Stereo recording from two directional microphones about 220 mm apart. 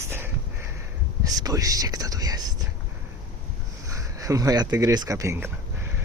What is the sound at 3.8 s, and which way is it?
Speech, 15° right (ahead or behind).